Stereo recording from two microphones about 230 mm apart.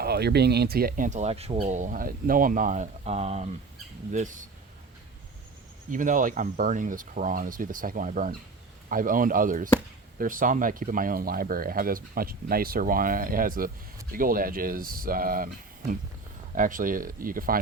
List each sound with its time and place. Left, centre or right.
0.0 s speech: right
5.9 s speech: right
16.6 s speech: right